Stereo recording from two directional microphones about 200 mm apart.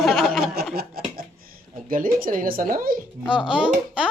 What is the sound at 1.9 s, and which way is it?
Speech, 45° right (ahead or behind).